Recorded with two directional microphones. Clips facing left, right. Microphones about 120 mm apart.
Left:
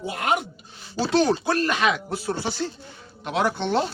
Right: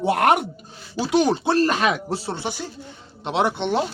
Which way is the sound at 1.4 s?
30° right (ahead or behind).